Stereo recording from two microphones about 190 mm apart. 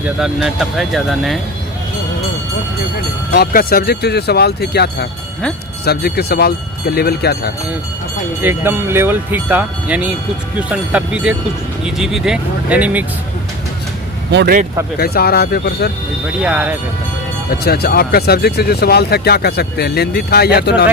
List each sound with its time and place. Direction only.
0.0 s speech: 5° right (ahead or behind)
3.3 s speech: 55° left (ahead or behind)
8.4 s speech: 10° right (ahead or behind)
14.3 s speech: 55° right (ahead or behind)
14.9 s speech: 55° left (ahead or behind)
16.4 s speech: 5° right (ahead or behind)
17.5 s speech: 55° left (ahead or behind)